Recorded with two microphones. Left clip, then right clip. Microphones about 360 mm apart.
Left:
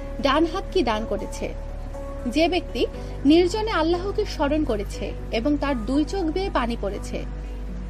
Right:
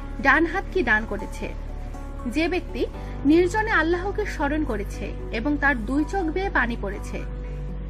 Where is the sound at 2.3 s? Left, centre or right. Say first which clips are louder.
Left 3 dB; centre.